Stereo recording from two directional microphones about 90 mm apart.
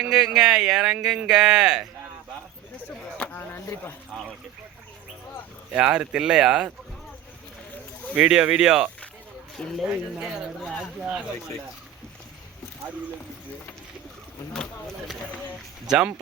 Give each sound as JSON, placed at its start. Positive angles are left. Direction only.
{"t": 0.0, "sound": "speech", "side_deg": -10}
{"t": 2.8, "sound": "a sound", "side_deg": 20}
{"t": 4.1, "sound": "speech", "side_deg": -10}
{"t": 5.7, "sound": "speech", "side_deg": -10}
{"t": 8.1, "sound": "speech", "side_deg": -15}
{"t": 9.6, "sound": "speech", "side_deg": 5}
{"t": 9.8, "sound": "speech", "side_deg": -10}
{"t": 15.9, "sound": "speech", "side_deg": -10}